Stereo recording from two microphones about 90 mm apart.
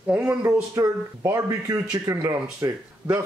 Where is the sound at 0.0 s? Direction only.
15° right (ahead or behind).